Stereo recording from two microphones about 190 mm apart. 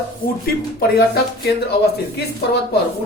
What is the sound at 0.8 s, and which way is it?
Speech, 55° left (ahead or behind).